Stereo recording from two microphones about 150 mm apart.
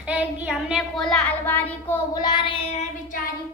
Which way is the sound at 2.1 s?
30° left (ahead or behind).